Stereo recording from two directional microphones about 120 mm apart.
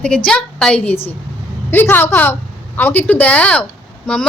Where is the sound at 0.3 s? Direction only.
5° left (ahead or behind).